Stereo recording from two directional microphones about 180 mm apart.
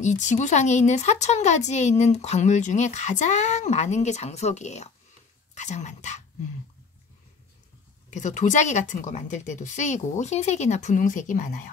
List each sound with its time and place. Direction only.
0.0 s a woman's voice: 40° left (ahead or behind)
8.1 s a woman's voice: 45° left (ahead or behind)